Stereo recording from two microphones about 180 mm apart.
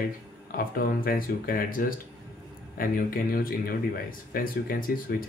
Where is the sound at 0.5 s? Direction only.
55° left (ahead or behind).